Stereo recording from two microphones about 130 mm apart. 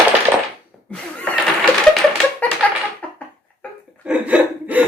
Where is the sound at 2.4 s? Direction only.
10° left (ahead or behind).